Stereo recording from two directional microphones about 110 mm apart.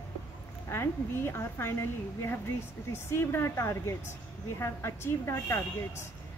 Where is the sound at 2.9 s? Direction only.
20° left (ahead or behind).